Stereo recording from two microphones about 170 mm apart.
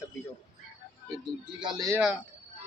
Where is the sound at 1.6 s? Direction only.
25° right (ahead or behind).